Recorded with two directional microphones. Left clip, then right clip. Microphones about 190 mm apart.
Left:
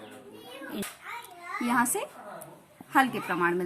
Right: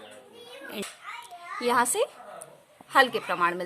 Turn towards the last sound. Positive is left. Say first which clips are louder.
# right 2 dB
turn(degrees=-40)  # may be behind; listen again after turning